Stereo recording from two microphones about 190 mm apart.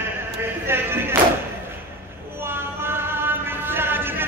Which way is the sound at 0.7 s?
10° right (ahead or behind).